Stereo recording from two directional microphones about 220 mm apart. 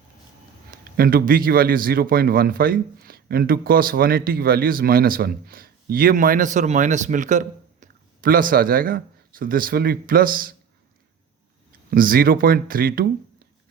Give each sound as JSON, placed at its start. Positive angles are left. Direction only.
{"t": 0.7, "sound": "a man's voice", "side_deg": -40}
{"t": 11.9, "sound": "a man's voice", "side_deg": -40}